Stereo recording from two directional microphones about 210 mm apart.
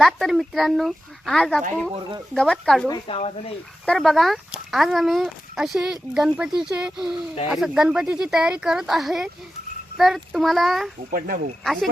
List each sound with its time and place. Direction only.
0.0 s speech: centre (ahead or behind)
2.9 s speech: 25° left (ahead or behind)
3.8 s speech: centre (ahead or behind)